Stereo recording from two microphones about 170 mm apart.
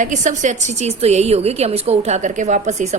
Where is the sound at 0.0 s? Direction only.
45° right (ahead or behind).